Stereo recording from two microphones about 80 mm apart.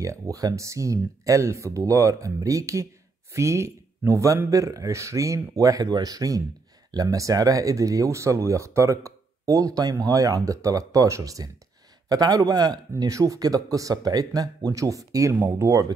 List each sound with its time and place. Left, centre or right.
0.0 s speech: right